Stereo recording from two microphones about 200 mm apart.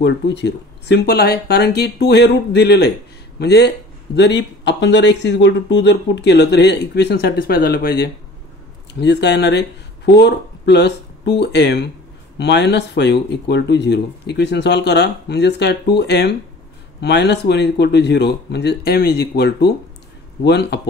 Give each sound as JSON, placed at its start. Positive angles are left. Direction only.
{"t": 0.0, "sound": "speech", "side_deg": 60}